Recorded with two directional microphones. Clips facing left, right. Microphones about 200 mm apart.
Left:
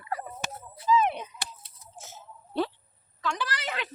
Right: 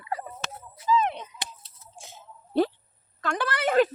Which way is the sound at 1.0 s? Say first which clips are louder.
Left 1 dB; 10° left (ahead or behind).